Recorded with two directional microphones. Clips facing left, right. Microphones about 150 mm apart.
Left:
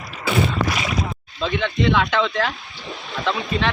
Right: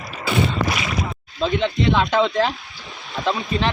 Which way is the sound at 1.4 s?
35° right (ahead or behind).